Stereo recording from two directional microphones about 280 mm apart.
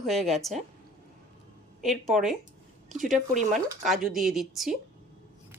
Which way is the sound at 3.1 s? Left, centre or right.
Right.